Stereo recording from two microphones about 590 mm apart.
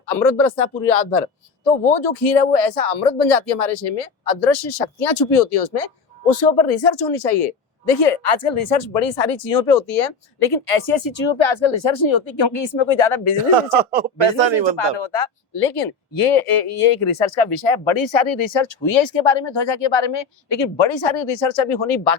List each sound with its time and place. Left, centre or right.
0.9 s a man's voice: left
13.5 s speech: right
14.8 s speech: left